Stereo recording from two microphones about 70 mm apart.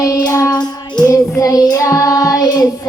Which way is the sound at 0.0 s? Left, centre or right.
Left.